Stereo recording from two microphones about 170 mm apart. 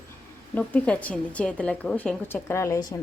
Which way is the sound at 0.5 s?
10° left (ahead or behind).